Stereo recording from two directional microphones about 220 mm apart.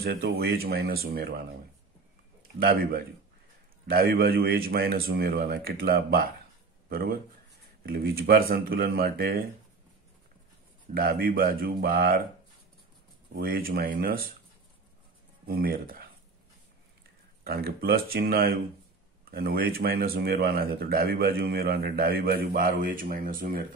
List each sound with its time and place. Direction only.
0.0 s speech: 45° right (ahead or behind)
2.6 s speech: 40° right (ahead or behind)
11.0 s speech: 40° right (ahead or behind)
13.4 s speech: 40° right (ahead or behind)
15.4 s speech: 45° right (ahead or behind)
17.4 s speech: 45° right (ahead or behind)